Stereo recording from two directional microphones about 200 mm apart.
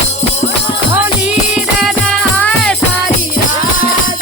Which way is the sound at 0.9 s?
5° right (ahead or behind).